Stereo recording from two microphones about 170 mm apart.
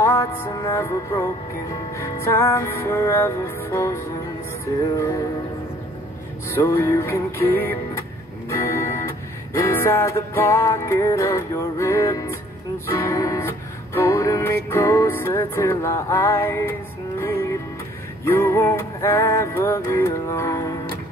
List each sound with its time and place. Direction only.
0.0 s music: 15° left (ahead or behind)
6.5 s music: 15° left (ahead or behind)